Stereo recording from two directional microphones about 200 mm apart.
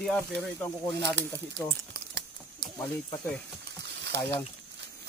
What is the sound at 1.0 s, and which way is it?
Speech, 60° right (ahead or behind).